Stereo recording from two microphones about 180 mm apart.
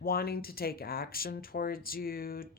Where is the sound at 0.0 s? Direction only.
55° left (ahead or behind).